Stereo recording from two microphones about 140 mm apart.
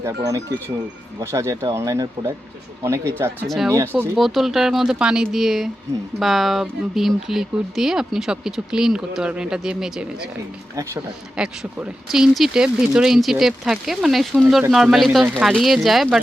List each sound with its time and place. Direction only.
0.0 s speech: 25° right (ahead or behind)
3.4 s speech: centre (ahead or behind)
3.7 s speech: 20° right (ahead or behind)
4.1 s speech: centre (ahead or behind)
11.3 s speech: 5° right (ahead or behind)